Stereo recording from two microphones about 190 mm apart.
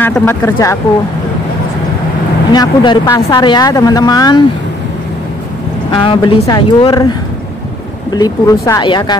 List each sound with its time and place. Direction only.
0.0 s speech: 10° left (ahead or behind)
2.5 s speech: 25° left (ahead or behind)
5.9 s speech: 25° left (ahead or behind)